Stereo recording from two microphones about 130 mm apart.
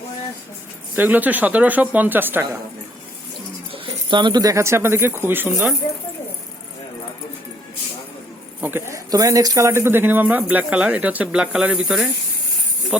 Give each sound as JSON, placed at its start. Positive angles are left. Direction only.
{"t": 0.9, "sound": "speech", "side_deg": -15}
{"t": 4.1, "sound": "speech", "side_deg": -35}
{"t": 8.6, "sound": "speech", "side_deg": -15}